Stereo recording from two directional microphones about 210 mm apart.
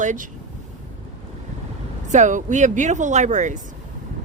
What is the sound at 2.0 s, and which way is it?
Speech, 35° right (ahead or behind).